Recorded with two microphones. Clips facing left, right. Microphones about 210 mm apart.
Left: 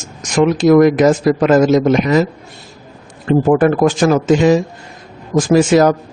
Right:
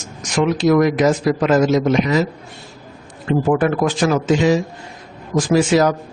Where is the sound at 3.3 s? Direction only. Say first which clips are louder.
Left 5 dB; 45° left (ahead or behind).